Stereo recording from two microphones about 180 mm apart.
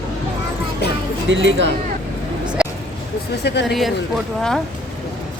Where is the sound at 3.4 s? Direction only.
70° left (ahead or behind).